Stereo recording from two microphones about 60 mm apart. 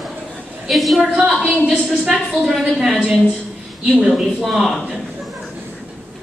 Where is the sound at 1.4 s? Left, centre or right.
Centre.